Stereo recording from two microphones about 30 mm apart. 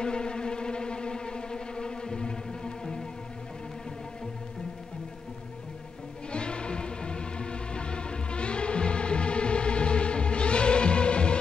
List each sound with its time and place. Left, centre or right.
0.0 s music: left
6.3 s music: left